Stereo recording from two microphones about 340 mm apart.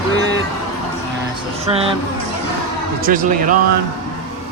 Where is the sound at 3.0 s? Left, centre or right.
Right.